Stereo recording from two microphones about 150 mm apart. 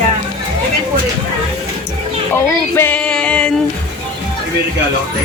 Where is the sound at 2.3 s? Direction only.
15° left (ahead or behind).